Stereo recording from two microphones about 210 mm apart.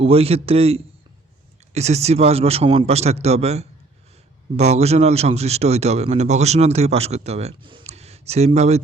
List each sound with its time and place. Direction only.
0.0 s a man's voice: 25° right (ahead or behind)